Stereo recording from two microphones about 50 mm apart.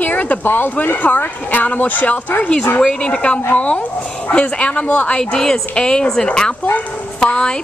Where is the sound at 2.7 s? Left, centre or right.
Centre.